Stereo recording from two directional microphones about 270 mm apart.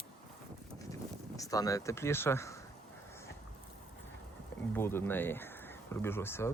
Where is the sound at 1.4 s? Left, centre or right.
Centre.